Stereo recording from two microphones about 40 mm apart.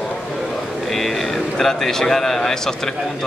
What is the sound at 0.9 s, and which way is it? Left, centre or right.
A man's voice, centre.